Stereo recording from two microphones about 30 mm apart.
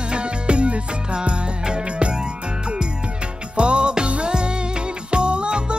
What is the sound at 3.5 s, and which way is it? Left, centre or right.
Music, right.